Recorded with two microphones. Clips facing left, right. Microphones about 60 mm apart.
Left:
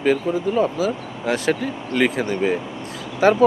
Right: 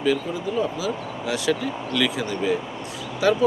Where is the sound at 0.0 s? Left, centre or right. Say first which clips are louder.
Left 4 dB; left.